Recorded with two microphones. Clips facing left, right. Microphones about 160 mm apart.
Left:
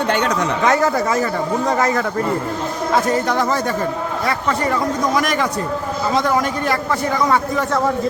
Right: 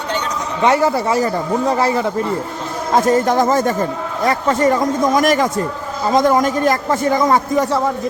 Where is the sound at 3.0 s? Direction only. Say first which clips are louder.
Right 5 dB; 45° right (ahead or behind).